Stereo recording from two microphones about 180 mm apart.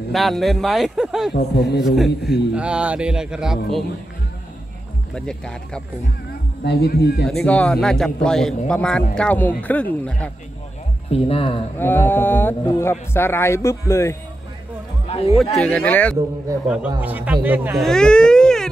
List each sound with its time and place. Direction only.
0.1 s a man's voice: centre (ahead or behind)
1.3 s a man's voice: 65° left (ahead or behind)
1.9 s a man's voice: centre (ahead or behind)
5.1 s a man's voice: 5° left (ahead or behind)
6.6 s a man's voice: 65° left (ahead or behind)
7.2 s a man's voice: 5° left (ahead or behind)
11.1 s speech: 30° left (ahead or behind)
11.8 s speech: 10° left (ahead or behind)
15.0 s chatter: 30° left (ahead or behind)
15.6 s speech: 5° left (ahead or behind)
16.6 s speech: 10° right (ahead or behind)
17.7 s speech: 5° left (ahead or behind)